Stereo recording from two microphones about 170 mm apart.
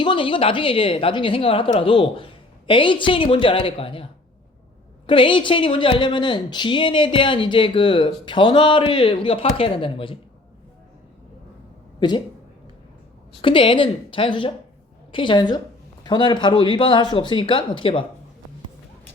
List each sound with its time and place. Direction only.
0.0 s a woman's voice: 30° left (ahead or behind)
5.0 s speech: 30° left (ahead or behind)
11.9 s speech: 25° left (ahead or behind)
13.4 s a woman's voice: 30° left (ahead or behind)